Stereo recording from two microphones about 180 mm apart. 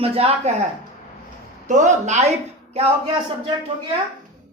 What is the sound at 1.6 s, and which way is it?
A woman's voice, 45° right (ahead or behind).